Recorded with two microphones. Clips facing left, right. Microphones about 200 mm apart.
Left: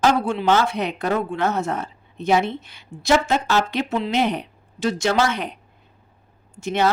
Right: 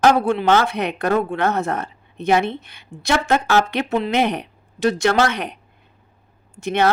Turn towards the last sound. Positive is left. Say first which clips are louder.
# right 2 dB
turn(degrees=-60)  # may be behind; listen again after turning